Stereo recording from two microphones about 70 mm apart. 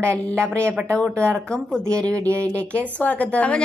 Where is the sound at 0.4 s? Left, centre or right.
Right.